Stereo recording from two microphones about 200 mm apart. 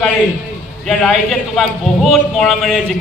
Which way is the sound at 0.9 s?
5° left (ahead or behind).